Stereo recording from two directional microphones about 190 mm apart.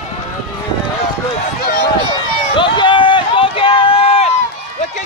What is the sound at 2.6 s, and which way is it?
Run, 25° left (ahead or behind).